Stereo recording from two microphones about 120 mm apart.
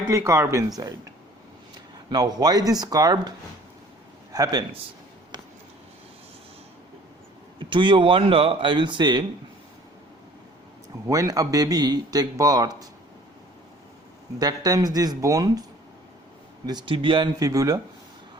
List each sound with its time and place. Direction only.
0.1 s speech: 25° right (ahead or behind)
2.0 s a man's voice: 35° right (ahead or behind)
7.6 s speech: 40° right (ahead or behind)
11.0 s a man's voice: 25° right (ahead or behind)
14.3 s a man's voice: 30° right (ahead or behind)
16.6 s speech: 40° right (ahead or behind)
17.4 s speech: 30° right (ahead or behind)